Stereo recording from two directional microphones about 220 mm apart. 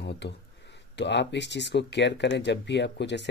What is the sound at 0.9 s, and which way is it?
Speech, 50° left (ahead or behind).